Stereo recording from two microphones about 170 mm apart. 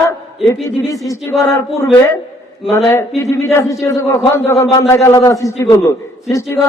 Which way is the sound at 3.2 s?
20° left (ahead or behind).